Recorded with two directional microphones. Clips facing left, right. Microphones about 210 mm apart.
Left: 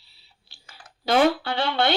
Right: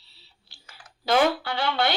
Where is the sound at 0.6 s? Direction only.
30° left (ahead or behind).